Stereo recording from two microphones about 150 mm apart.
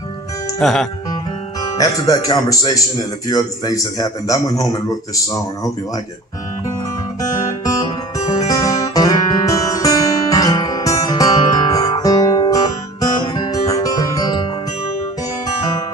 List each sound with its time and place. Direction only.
0.6 s speech: centre (ahead or behind)
1.6 s speech: 25° left (ahead or behind)
7.2 s guitar: 20° left (ahead or behind)